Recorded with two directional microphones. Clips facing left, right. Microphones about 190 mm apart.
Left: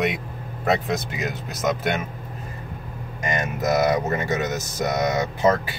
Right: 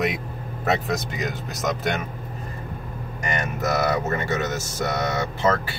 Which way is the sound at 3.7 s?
15° left (ahead or behind).